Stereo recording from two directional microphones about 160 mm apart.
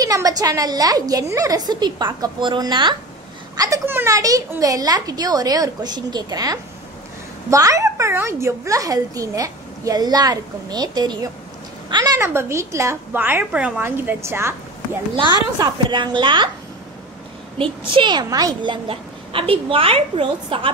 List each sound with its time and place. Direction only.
0.0 s a child's voice: 20° right (ahead or behind)
15.1 s a child's voice: 30° right (ahead or behind)
17.6 s a child's voice: 30° right (ahead or behind)